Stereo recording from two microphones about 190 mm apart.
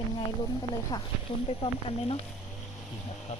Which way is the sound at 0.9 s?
15° left (ahead or behind).